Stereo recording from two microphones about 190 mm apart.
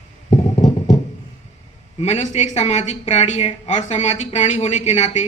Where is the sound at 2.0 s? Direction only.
35° left (ahead or behind).